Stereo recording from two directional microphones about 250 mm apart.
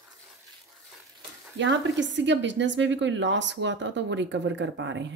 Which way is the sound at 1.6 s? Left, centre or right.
Right.